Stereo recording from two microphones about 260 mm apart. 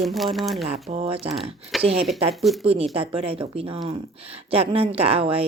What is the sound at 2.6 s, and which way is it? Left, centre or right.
Speech, right.